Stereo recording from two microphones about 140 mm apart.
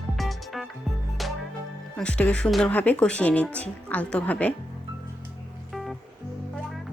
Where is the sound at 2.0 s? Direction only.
10° left (ahead or behind).